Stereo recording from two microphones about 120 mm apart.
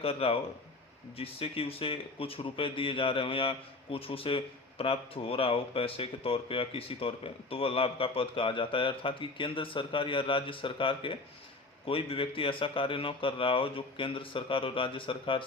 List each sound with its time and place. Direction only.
0.0 s a man's voice: 55° left (ahead or behind)